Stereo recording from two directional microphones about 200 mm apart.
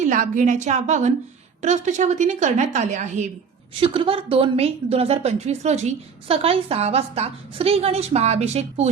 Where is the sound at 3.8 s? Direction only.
25° right (ahead or behind).